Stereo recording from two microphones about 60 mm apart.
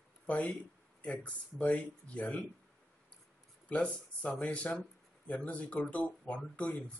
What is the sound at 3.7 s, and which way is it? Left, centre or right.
Speech, centre.